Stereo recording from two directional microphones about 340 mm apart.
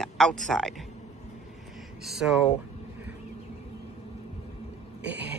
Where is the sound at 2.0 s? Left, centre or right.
Centre.